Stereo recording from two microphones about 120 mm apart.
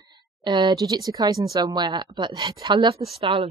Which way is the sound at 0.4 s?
40° right (ahead or behind).